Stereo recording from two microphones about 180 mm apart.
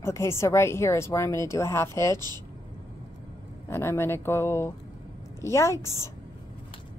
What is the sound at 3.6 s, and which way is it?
Speech, 15° left (ahead or behind).